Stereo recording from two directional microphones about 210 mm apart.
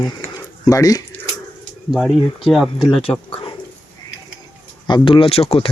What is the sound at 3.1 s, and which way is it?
Speech, 15° left (ahead or behind).